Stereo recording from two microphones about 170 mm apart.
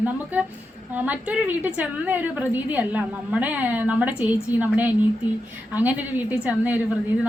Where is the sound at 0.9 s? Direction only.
10° right (ahead or behind).